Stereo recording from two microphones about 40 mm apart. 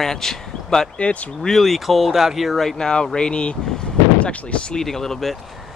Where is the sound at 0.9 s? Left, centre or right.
Left.